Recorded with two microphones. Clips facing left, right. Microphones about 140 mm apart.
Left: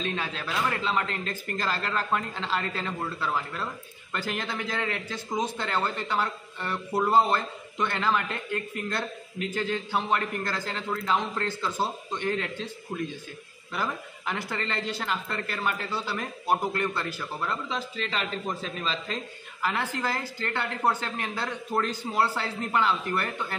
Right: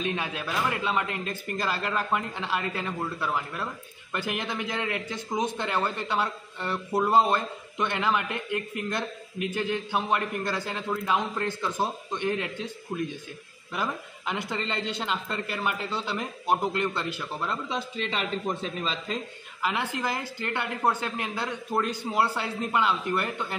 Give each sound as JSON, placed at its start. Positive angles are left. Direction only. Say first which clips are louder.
{"t": 0.0, "sound": "a man's voice", "louder": "right 1 dB", "side_deg": -15}